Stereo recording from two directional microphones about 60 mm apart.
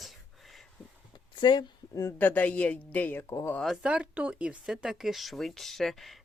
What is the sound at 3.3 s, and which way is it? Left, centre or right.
Speech, left.